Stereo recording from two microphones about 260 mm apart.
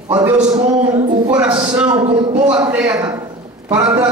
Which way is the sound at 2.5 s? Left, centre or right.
Centre.